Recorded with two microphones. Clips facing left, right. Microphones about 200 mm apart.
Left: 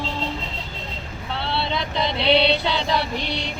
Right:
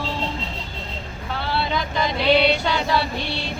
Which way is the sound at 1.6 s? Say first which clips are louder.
Right 1 dB; 25° left (ahead or behind).